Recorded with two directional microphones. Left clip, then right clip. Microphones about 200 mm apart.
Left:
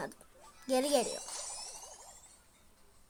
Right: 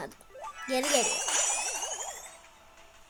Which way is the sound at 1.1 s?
45° right (ahead or behind).